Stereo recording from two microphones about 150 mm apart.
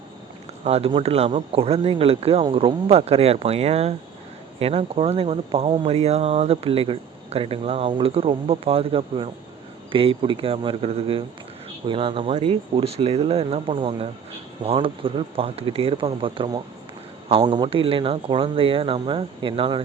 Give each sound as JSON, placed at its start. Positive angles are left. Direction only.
{"t": 0.6, "sound": "speech", "side_deg": -45}